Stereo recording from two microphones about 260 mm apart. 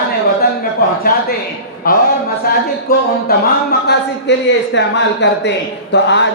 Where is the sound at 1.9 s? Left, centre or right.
Left.